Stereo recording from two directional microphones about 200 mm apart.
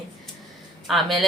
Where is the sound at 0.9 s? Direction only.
Centre (ahead or behind).